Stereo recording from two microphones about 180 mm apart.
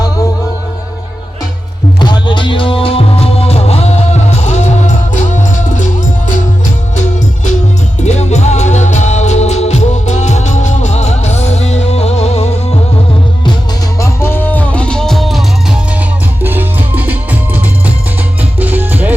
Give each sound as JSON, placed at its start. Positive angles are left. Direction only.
{"t": 2.0, "sound": "music", "side_deg": 25}
{"t": 8.0, "sound": "music", "side_deg": 40}
{"t": 14.0, "sound": "music", "side_deg": 15}